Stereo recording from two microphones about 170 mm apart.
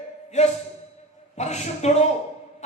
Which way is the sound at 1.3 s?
40° left (ahead or behind).